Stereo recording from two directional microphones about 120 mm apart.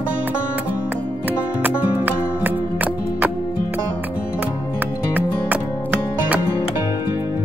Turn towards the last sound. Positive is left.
turn(degrees=-10)  # may be behind; listen again after turning